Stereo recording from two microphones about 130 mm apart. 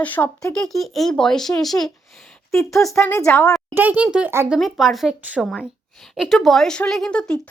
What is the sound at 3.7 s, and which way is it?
A child's voice, 10° right (ahead or behind).